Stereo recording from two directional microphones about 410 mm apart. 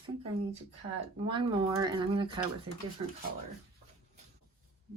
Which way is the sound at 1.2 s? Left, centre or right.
Centre.